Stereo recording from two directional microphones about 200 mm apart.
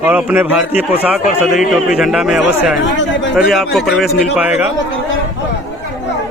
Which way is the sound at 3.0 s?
65° left (ahead or behind).